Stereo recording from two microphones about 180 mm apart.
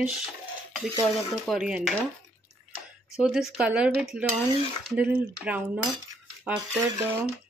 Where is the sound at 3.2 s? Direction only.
5° right (ahead or behind).